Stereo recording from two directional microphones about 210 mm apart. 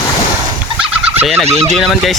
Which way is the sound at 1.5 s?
30° right (ahead or behind).